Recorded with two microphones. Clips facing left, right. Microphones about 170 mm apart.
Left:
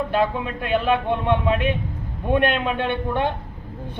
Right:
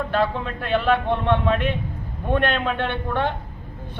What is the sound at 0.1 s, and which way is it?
A man's voice, 10° left (ahead or behind).